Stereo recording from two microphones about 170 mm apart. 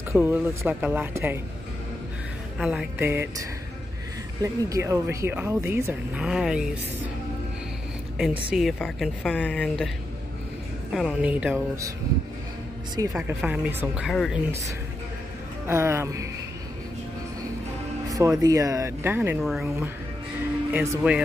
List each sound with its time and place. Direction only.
0.1 s speech: 10° right (ahead or behind)
2.6 s speech: 5° right (ahead or behind)
6.2 s a woman's voice: 5° right (ahead or behind)
8.2 s a woman's voice: 5° right (ahead or behind)
10.9 s speech: 5° right (ahead or behind)
13.1 s speech: 5° right (ahead or behind)
14.0 s a woman's voice: centre (ahead or behind)
15.6 s speech: 15° right (ahead or behind)
18.0 s speech: 20° right (ahead or behind)
19.4 s a woman's voice: centre (ahead or behind)
20.7 s speech: 15° right (ahead or behind)